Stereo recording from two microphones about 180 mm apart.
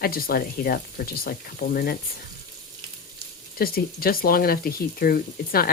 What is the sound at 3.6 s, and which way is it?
Speech, 55° left (ahead or behind).